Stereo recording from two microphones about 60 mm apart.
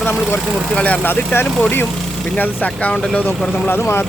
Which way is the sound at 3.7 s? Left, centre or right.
Left.